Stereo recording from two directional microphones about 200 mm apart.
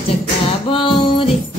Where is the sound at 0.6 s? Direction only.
25° left (ahead or behind).